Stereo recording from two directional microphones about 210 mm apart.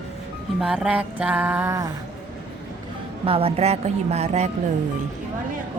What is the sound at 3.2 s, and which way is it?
Speech, 25° right (ahead or behind).